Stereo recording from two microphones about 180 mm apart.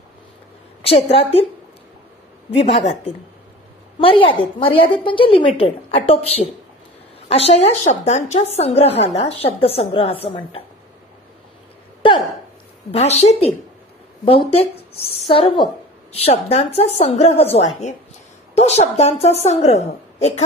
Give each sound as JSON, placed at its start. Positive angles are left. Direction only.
{"t": 0.8, "sound": "a woman's voice", "side_deg": 35}
{"t": 2.5, "sound": "a woman's voice", "side_deg": 35}
{"t": 4.0, "sound": "a woman's voice", "side_deg": 30}
{"t": 12.0, "sound": "a sound", "side_deg": 30}
{"t": 12.9, "sound": "a woman's voice", "side_deg": 35}
{"t": 14.5, "sound": "a woman's voice", "side_deg": 35}